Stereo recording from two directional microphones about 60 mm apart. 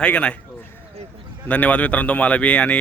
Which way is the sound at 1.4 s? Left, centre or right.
Left.